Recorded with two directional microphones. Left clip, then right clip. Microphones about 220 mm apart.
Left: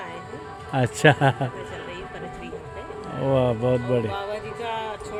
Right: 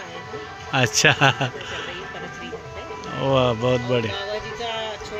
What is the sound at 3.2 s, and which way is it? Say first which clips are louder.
Speech: right 2 dB; 10° left (ahead or behind).